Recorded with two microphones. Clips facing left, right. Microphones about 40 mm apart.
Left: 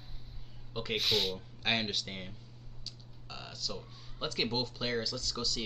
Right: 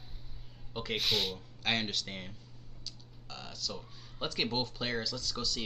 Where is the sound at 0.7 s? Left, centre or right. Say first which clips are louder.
Left 1 dB; centre.